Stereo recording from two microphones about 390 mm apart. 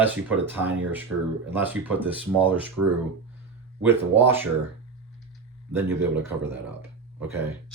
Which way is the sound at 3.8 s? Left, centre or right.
Centre.